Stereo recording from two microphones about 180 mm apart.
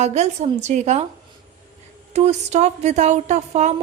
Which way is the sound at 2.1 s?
40° right (ahead or behind).